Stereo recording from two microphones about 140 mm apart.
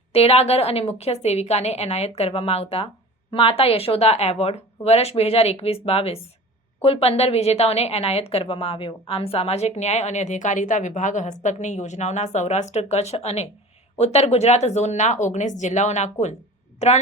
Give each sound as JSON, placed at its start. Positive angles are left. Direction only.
{"t": 0.1, "sound": "a woman's voice", "side_deg": 45}